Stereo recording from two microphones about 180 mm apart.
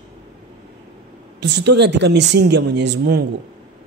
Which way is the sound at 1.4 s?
70° right (ahead or behind).